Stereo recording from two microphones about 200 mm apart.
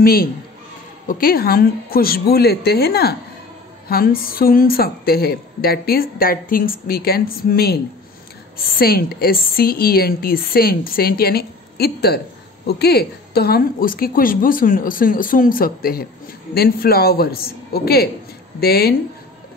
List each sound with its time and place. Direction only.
0.0 s a woman's voice: 50° left (ahead or behind)